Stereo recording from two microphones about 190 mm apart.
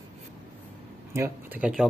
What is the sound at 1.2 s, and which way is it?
Speech, 10° right (ahead or behind).